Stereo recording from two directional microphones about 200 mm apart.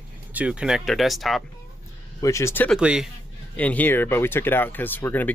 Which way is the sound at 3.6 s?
10° left (ahead or behind).